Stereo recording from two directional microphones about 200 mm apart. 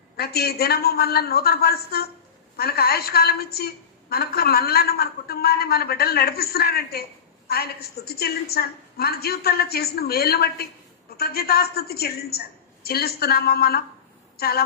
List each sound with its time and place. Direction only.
0.2 s a woman's voice: 50° left (ahead or behind)